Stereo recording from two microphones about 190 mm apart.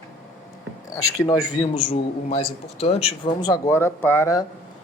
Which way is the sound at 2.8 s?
30° left (ahead or behind).